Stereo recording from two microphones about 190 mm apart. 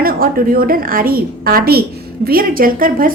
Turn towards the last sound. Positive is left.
turn(degrees=-45)  # may be behind; listen again after turning